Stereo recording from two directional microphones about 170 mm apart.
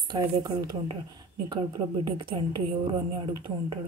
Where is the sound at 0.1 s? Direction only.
25° right (ahead or behind).